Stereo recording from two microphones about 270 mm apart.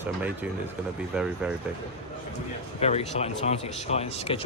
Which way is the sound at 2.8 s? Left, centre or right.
Left.